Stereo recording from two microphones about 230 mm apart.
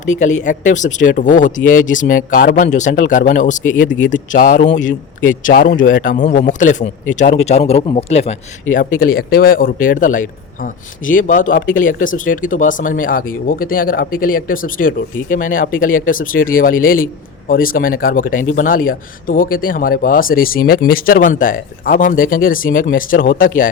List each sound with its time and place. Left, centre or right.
0.0 s a man's voice: left
8.7 s a man's voice: left